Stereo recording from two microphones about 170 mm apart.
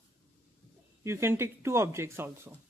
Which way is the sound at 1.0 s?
15° right (ahead or behind).